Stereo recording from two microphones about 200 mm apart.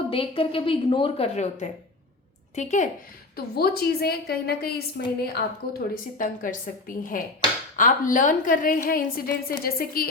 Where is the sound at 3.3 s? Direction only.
50° left (ahead or behind).